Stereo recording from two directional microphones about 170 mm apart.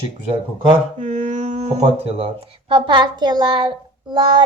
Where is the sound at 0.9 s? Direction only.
45° right (ahead or behind).